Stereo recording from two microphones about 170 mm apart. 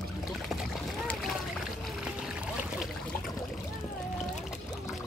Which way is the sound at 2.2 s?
5° right (ahead or behind).